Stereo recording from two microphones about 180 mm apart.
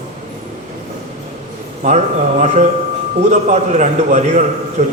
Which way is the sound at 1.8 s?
40° right (ahead or behind).